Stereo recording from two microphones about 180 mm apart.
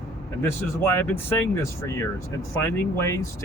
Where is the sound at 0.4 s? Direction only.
15° left (ahead or behind).